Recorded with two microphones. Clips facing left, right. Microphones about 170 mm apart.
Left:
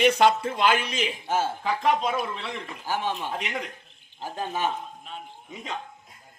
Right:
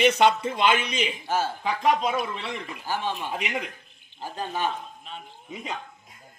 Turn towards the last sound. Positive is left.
turn(degrees=-5)  # may be behind; listen again after turning